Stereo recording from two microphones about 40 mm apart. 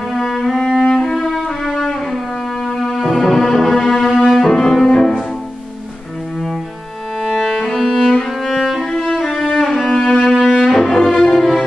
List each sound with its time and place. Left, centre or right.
0.1 s cello: centre
0.8 s music: centre
1.1 s music: centre
7.2 s music: centre
9.0 s music: centre
9.6 s cello: centre
10.8 s music: centre